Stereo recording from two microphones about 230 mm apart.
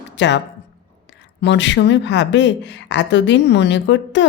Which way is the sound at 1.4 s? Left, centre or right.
Left.